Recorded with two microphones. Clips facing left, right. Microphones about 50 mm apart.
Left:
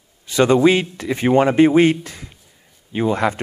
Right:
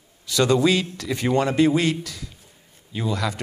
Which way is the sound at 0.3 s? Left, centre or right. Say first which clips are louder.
Left 5 dB; left.